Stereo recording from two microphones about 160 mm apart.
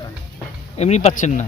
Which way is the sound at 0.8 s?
45° left (ahead or behind).